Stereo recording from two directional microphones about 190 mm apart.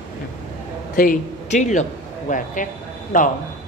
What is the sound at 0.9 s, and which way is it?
Speech, 45° left (ahead or behind).